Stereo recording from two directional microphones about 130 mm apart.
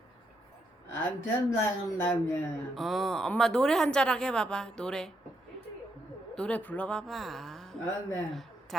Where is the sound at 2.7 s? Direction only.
Centre (ahead or behind).